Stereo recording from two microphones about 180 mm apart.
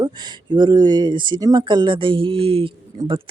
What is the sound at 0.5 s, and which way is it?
Speech, 25° right (ahead or behind).